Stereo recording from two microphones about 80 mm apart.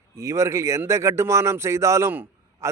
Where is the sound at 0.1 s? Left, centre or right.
Right.